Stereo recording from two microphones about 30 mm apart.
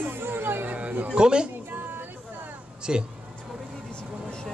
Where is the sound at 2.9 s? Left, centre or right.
Right.